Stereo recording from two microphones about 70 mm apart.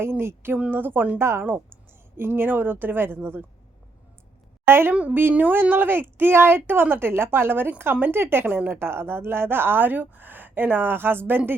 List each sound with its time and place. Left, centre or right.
0.0 s speech: right
4.6 s speech: right